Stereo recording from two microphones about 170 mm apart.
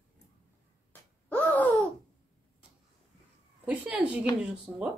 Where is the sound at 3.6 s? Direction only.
10° right (ahead or behind).